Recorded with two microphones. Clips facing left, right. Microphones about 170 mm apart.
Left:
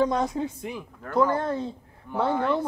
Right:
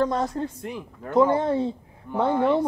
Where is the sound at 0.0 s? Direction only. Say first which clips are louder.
Even; centre (ahead or behind).